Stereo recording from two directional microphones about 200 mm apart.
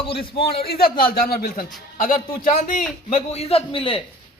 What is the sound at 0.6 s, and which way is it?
A man's voice, 50° left (ahead or behind).